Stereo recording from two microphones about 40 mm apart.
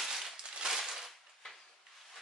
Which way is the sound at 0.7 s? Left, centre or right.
Centre.